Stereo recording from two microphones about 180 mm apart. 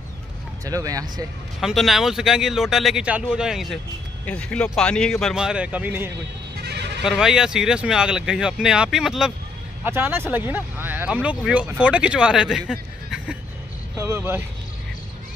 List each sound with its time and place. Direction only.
0.7 s speech: 20° right (ahead or behind)
1.6 s speech: centre (ahead or behind)
6.6 s bleat: 65° right (ahead or behind)
7.0 s speech: centre (ahead or behind)